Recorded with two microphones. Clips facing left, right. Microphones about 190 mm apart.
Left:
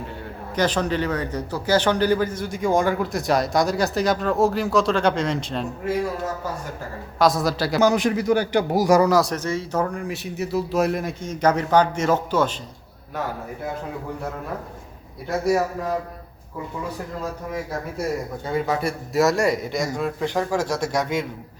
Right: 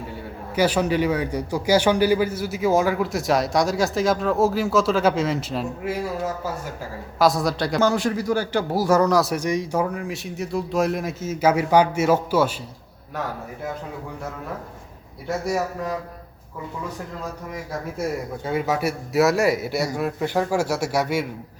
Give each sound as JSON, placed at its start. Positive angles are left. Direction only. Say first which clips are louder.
{"t": 0.5, "sound": "a man's voice", "louder": "right 2 dB", "side_deg": -10}
{"t": 7.2, "sound": "a man's voice", "louder": "even", "side_deg": 0}
{"t": 7.8, "sound": "a man's voice", "louder": "left 3 dB", "side_deg": 15}
{"t": 9.3, "sound": "speech", "louder": "right 2 dB", "side_deg": -15}
{"t": 15.3, "sound": "a man's voice", "louder": "left 3 dB", "side_deg": 0}
{"t": 18.4, "sound": "speech", "louder": "right 1 dB", "side_deg": -10}